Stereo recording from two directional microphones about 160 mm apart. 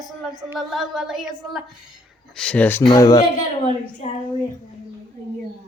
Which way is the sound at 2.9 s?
25° left (ahead or behind).